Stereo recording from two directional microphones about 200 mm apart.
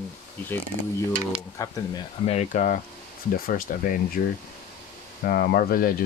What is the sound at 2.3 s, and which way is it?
Speech, 35° left (ahead or behind).